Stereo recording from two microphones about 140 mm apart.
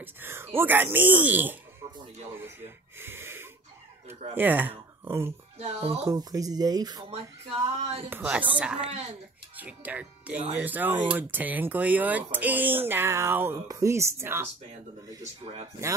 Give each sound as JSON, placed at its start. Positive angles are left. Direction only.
{"t": 0.0, "sound": "speech", "side_deg": -15}
{"t": 3.0, "sound": "snort", "side_deg": -15}
{"t": 4.4, "sound": "speech", "side_deg": -15}
{"t": 5.6, "sound": "speech", "side_deg": -50}
{"t": 6.1, "sound": "speech", "side_deg": -25}
{"t": 7.8, "sound": "speech", "side_deg": -45}
{"t": 8.1, "sound": "speech", "side_deg": -10}